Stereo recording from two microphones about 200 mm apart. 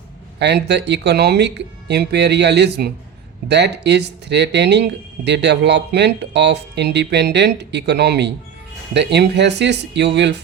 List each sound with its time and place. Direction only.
0.3 s speech: 60° right (ahead or behind)